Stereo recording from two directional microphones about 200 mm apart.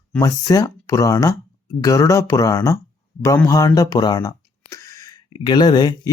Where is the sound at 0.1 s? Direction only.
15° left (ahead or behind).